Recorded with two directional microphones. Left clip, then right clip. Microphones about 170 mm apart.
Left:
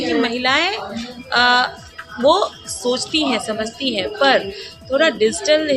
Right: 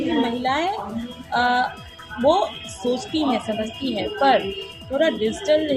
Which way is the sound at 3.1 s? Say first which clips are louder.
Left 3 dB; 40° left (ahead or behind).